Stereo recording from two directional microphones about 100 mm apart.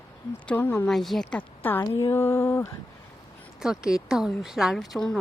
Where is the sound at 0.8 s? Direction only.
Centre (ahead or behind).